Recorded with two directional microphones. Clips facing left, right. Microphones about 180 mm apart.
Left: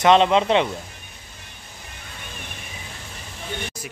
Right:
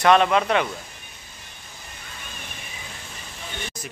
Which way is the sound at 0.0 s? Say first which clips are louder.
Left 2 dB; 20° left (ahead or behind).